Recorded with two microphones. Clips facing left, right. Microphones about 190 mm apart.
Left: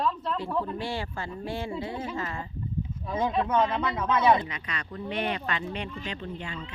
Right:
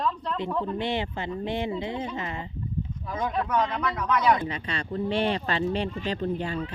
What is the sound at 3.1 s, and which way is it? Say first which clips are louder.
Speech: left 2 dB; 25° left (ahead or behind).